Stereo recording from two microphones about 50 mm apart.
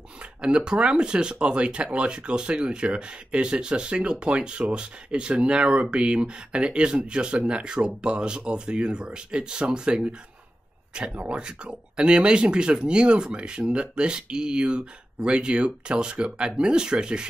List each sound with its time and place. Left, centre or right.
0.4 s speech: centre
11.1 s speech: right